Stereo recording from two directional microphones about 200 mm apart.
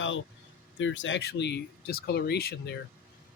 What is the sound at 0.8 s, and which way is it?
Speech, 70° left (ahead or behind).